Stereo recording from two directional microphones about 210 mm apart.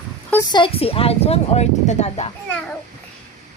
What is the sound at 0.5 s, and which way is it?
Speech, 25° left (ahead or behind).